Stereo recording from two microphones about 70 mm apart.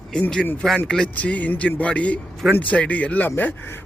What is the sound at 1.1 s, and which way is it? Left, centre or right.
A man's voice, left.